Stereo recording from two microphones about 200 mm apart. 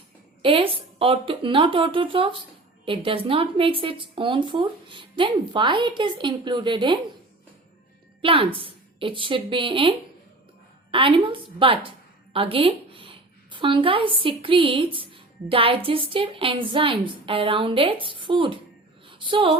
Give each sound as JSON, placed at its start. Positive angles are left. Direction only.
{"t": 0.4, "sound": "a woman's voice", "side_deg": -25}
{"t": 8.2, "sound": "a woman's voice", "side_deg": -25}
{"t": 10.9, "sound": "a woman's voice", "side_deg": -25}
{"t": 19.0, "sound": "a sound", "side_deg": -25}